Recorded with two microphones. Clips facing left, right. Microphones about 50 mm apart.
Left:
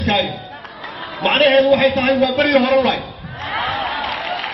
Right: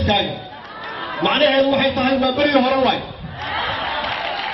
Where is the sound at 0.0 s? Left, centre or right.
Left.